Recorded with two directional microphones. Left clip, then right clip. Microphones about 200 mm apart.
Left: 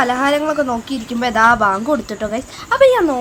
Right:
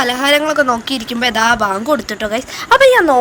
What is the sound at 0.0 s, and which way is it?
A woman's voice, 45° right (ahead or behind).